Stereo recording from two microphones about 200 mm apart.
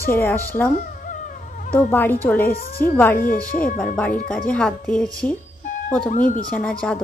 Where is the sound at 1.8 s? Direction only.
10° left (ahead or behind).